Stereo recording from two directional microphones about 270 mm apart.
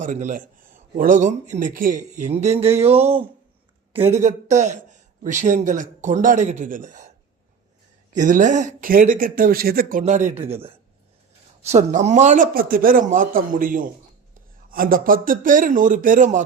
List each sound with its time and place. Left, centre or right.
0.0 s speech: right
8.1 s speech: right
11.6 s a man's voice: right